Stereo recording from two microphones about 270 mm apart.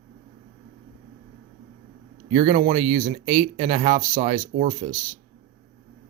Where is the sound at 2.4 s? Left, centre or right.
Right.